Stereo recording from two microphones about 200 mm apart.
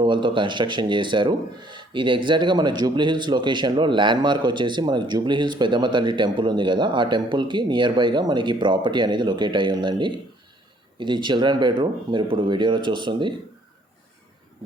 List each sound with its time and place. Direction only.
0.0 s speech: 25° right (ahead or behind)